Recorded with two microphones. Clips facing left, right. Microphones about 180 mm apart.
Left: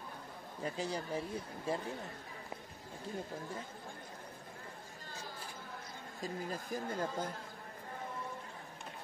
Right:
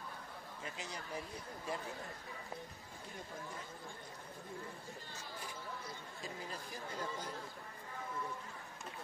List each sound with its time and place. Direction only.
0.6 s speech: 35° left (ahead or behind)
6.2 s speech: 45° left (ahead or behind)